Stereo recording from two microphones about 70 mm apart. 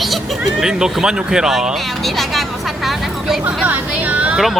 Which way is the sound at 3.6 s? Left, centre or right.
Right.